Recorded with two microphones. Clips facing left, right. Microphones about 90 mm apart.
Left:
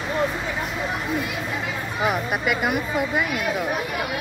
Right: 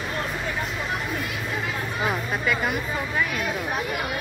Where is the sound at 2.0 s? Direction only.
15° left (ahead or behind).